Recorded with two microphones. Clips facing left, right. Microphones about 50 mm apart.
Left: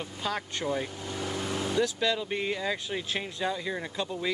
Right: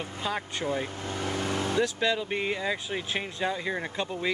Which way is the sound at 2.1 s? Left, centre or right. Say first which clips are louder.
Right 1 dB; centre.